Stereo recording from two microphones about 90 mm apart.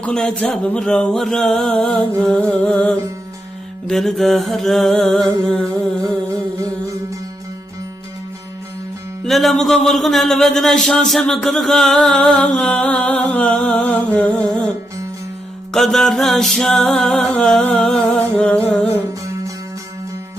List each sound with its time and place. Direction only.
0.0 s a man's voice: 10° left (ahead or behind)
3.8 s music: 5° left (ahead or behind)
5.4 s a man's voice: 5° left (ahead or behind)
6.1 s music: 40° right (ahead or behind)
9.2 s a man's voice: centre (ahead or behind)
15.7 s a man's voice: 5° left (ahead or behind)
19.2 s music: 40° right (ahead or behind)